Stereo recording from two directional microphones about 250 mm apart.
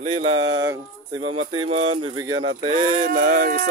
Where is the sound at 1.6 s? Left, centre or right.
Right.